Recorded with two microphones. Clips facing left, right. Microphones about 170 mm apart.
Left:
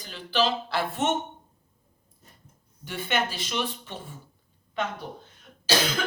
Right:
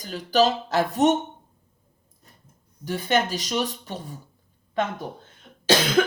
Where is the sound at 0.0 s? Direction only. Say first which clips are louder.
Right 6 dB; 40° right (ahead or behind).